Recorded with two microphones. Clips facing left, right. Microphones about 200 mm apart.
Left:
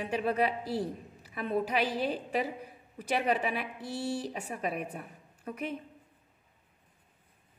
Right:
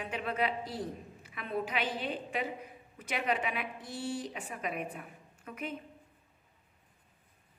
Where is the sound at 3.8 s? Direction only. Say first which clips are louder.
Left 4 dB; 65° left (ahead or behind).